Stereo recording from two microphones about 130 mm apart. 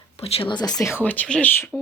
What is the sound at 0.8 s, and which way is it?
Speech, 15° left (ahead or behind).